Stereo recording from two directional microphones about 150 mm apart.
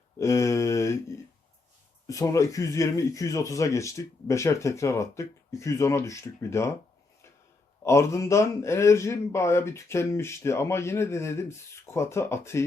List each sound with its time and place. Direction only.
0.2 s mantra: 20° left (ahead or behind)
2.0 s speech: 20° left (ahead or behind)
7.9 s speech: 20° left (ahead or behind)